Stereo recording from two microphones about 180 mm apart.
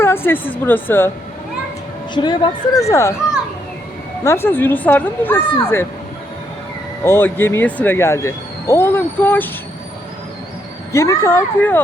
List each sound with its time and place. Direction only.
0.0 s a sound: 10° left (ahead or behind)
0.6 s speech: 10° left (ahead or behind)
2.1 s a woman's voice: 25° left (ahead or behind)
4.2 s speech: 15° left (ahead or behind)
7.0 s speech: 10° left (ahead or behind)
10.9 s speech: 15° left (ahead or behind)